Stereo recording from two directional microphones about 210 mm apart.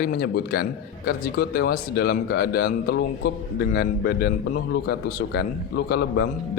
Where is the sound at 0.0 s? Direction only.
45° left (ahead or behind).